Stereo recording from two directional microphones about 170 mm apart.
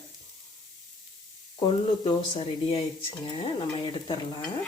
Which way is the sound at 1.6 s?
30° left (ahead or behind).